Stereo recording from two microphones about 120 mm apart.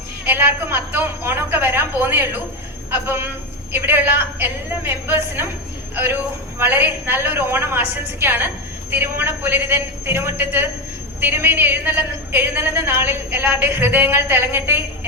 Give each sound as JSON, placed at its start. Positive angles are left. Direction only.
{"t": 0.3, "sound": "a woman's voice", "side_deg": -15}
{"t": 3.7, "sound": "a woman's voice", "side_deg": -20}
{"t": 6.6, "sound": "a woman's voice", "side_deg": -20}